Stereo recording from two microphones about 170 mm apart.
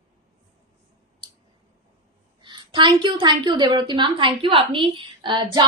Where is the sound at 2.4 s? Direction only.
30° right (ahead or behind).